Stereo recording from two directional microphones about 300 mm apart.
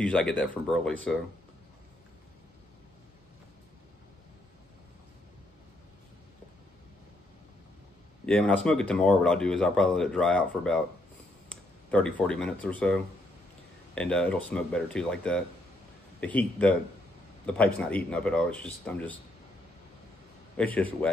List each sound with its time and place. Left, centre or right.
0.0 s speech: centre
8.3 s speech: centre
20.5 s speech: centre